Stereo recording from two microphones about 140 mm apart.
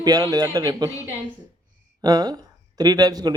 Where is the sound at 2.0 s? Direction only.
25° right (ahead or behind).